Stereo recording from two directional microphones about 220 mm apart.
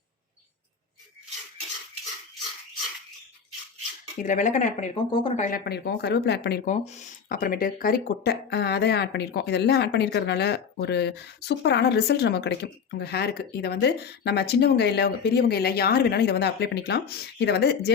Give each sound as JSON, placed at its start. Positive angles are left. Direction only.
{"t": 4.2, "sound": "speech", "side_deg": 35}
{"t": 5.5, "sound": "speech", "side_deg": 45}
{"t": 6.8, "sound": "speech", "side_deg": 30}